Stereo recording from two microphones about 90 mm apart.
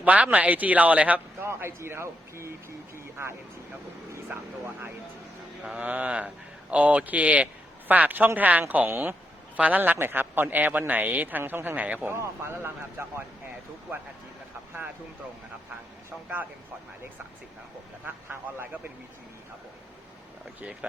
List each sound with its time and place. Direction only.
0.0 s speech: 15° right (ahead or behind)
1.5 s a man's voice: 30° right (ahead or behind)
2.9 s a sound: 30° right (ahead or behind)
4.3 s a man's voice: 25° right (ahead or behind)
5.6 s a man's voice: 10° right (ahead or behind)
12.1 s a man's voice: 30° right (ahead or behind)
16.0 s a man's voice: 20° right (ahead or behind)
18.0 s a man's voice: 20° right (ahead or behind)